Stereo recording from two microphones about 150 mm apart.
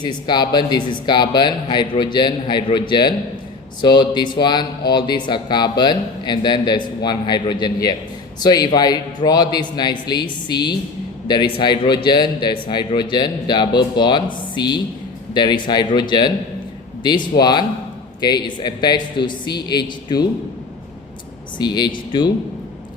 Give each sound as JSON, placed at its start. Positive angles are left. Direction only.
{"t": 0.0, "sound": "a man's voice", "side_deg": 30}
{"t": 21.6, "sound": "a man's voice", "side_deg": 30}